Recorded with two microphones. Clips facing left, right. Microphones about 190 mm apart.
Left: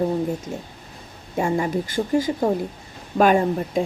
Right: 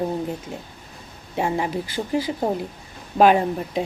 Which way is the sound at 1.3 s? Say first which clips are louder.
Left 2 dB; 45° left (ahead or behind).